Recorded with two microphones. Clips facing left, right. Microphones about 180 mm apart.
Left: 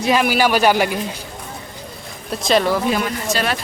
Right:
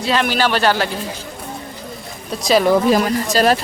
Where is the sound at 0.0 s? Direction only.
10° left (ahead or behind).